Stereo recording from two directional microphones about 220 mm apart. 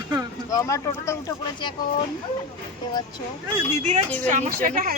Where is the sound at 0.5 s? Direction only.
15° left (ahead or behind).